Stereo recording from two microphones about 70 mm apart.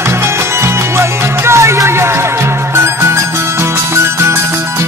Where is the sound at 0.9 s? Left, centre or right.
Right.